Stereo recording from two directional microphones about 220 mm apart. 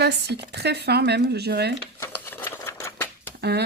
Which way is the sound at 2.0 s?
10° left (ahead or behind).